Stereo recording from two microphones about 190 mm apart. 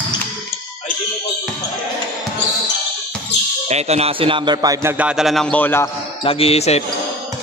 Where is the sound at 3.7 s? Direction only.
35° right (ahead or behind); by 5.9 s 10° left (ahead or behind).